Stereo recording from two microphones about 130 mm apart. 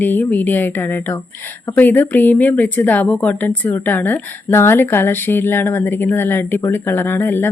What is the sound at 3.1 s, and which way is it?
A woman's voice, centre (ahead or behind).